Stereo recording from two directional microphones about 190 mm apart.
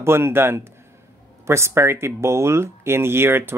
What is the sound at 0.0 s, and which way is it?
Speech, 15° right (ahead or behind).